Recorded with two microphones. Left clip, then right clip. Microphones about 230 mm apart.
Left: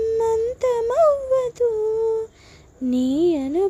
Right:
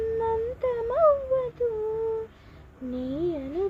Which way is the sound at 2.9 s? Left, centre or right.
Left.